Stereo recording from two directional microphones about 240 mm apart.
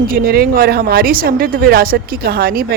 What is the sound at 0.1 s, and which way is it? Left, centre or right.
Speech, right.